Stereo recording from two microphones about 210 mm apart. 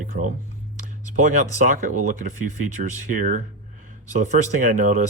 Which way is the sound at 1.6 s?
40° right (ahead or behind).